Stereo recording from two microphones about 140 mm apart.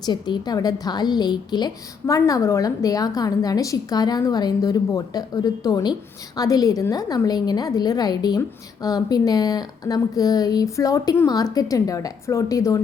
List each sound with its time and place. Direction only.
0.0 s a woman's voice: 30° left (ahead or behind)